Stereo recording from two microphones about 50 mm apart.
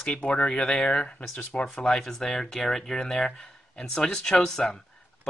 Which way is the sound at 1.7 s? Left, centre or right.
Centre.